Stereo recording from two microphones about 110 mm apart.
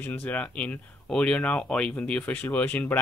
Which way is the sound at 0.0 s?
15° left (ahead or behind).